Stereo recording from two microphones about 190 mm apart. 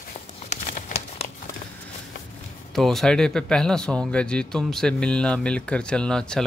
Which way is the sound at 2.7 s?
Centre (ahead or behind).